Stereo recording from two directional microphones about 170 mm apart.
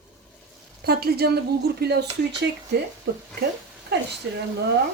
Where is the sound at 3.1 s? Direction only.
90° right.